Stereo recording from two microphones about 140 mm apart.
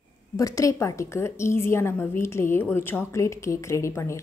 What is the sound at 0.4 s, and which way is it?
A woman's voice, 25° left (ahead or behind).